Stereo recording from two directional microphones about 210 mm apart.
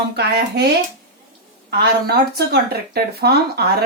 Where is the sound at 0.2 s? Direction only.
50° right (ahead or behind).